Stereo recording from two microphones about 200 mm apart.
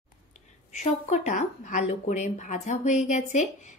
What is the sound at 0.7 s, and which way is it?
Speech, 35° left (ahead or behind).